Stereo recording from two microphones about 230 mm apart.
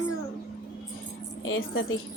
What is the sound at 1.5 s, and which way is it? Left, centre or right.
Keys jangling, left.